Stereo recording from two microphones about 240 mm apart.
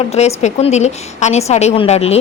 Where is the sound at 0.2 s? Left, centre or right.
Left.